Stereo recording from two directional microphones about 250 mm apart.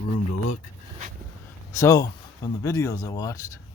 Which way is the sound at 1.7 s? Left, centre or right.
Centre.